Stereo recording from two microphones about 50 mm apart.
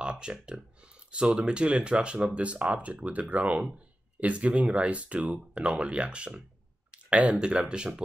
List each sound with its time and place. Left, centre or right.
0.0 s speech: centre